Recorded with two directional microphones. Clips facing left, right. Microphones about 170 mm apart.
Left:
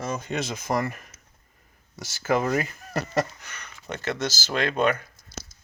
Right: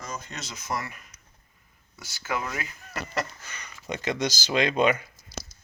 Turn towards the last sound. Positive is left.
turn(degrees=-10)  # may be behind; listen again after turning